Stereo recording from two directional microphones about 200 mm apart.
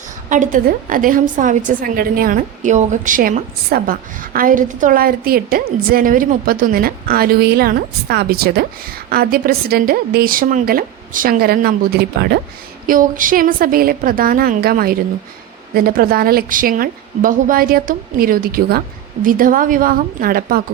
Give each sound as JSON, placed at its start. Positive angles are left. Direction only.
{"t": 0.3, "sound": "a woman's voice", "side_deg": -40}
{"t": 12.9, "sound": "a woman's voice", "side_deg": -40}